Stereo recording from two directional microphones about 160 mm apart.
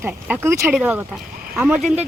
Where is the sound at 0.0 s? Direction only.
15° right (ahead or behind).